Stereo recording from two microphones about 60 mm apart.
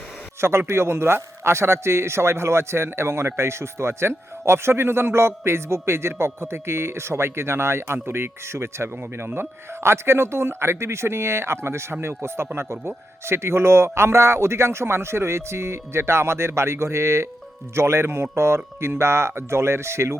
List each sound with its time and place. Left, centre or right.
0.7 s speech: right